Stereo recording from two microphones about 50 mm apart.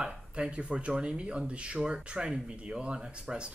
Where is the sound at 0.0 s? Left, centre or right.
Right.